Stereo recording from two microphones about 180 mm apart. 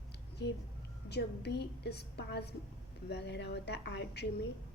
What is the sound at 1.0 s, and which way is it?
A woman's voice, 65° left (ahead or behind).